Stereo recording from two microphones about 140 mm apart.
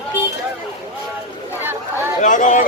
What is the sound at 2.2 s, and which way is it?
Speech, 65° left (ahead or behind).